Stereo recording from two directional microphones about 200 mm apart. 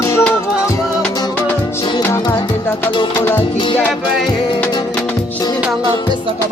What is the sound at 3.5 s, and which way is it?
Music, 25° left (ahead or behind).